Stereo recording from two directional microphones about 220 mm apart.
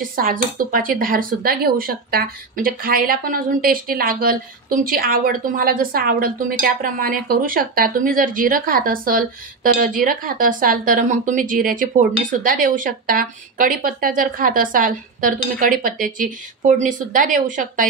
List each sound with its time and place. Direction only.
0.1 s speech: 40° right (ahead or behind)